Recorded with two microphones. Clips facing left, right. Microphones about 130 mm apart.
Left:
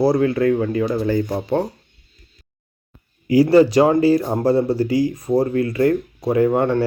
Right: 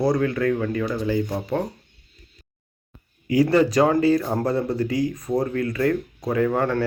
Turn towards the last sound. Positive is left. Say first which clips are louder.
# left 5 dB
turn(degrees=20)  # may be behind; listen again after turning